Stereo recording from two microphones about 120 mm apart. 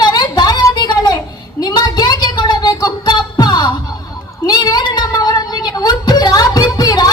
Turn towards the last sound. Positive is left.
turn(degrees=30)  # may be behind; listen again after turning